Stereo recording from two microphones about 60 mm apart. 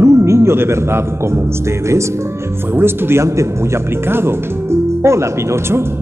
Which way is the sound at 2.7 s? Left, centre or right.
Right.